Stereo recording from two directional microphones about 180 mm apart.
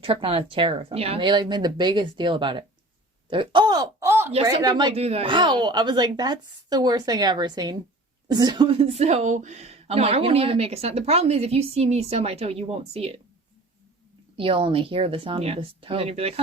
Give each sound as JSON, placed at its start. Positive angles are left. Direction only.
{"t": 0.0, "sound": "speech", "side_deg": -30}
{"t": 14.3, "sound": "speech", "side_deg": -30}